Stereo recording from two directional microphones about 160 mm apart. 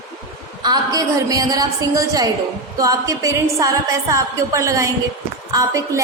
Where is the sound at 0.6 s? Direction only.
25° right (ahead or behind).